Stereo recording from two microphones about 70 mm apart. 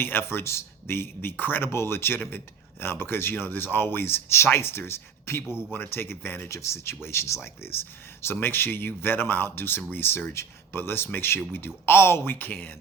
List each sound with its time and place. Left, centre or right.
0.0 s speech: left
5.5 s speech: centre
5.7 s speech: left